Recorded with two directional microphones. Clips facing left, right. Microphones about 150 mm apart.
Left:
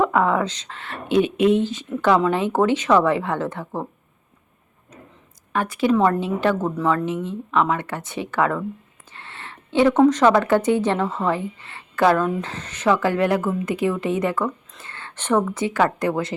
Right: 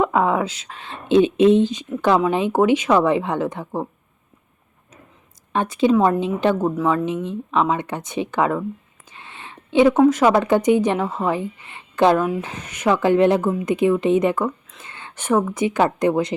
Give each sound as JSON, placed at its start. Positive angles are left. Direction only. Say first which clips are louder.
{"t": 0.0, "sound": "speech", "louder": "even", "side_deg": -15}
{"t": 5.5, "sound": "speech", "louder": "right 2 dB", "side_deg": -20}
{"t": 9.1, "sound": "a sound", "louder": "even", "side_deg": -15}
{"t": 10.3, "sound": "speech", "louder": "right 2 dB", "side_deg": -15}